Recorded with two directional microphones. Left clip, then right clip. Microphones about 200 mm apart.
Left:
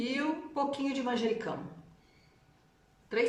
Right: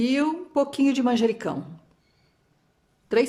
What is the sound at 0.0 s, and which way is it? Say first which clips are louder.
Speech: right 9 dB; 60° right (ahead or behind).